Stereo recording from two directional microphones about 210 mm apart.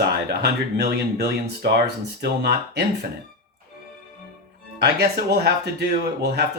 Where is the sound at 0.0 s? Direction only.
50° right (ahead or behind).